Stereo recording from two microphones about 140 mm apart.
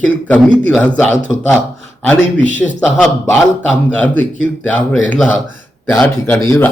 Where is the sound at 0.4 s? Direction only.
10° left (ahead or behind).